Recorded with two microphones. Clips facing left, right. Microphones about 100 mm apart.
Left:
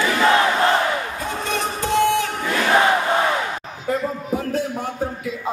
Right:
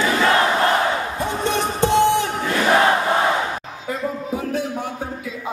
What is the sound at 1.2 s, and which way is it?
Battle cry, 25° right (ahead or behind).